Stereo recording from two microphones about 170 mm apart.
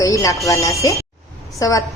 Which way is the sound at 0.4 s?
20° left (ahead or behind).